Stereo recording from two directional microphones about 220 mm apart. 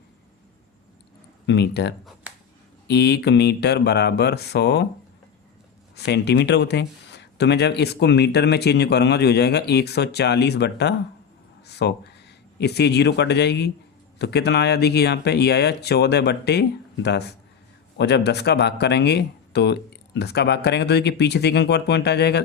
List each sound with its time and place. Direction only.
1.5 s speech: 50° left (ahead or behind)
6.1 s speech: 50° left (ahead or behind)